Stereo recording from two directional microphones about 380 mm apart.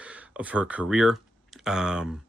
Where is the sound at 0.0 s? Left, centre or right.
Centre.